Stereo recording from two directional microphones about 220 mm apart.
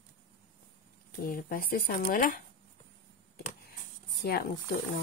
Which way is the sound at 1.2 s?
40° left (ahead or behind).